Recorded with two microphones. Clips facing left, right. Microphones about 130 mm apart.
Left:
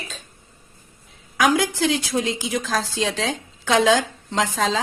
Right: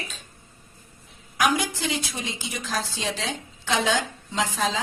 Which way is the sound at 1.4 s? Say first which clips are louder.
Left 5 dB; 90° left.